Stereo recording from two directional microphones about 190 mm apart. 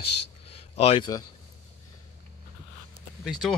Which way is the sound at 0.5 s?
30° left (ahead or behind).